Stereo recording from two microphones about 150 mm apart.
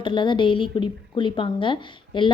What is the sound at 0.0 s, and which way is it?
A woman's voice, 30° left (ahead or behind).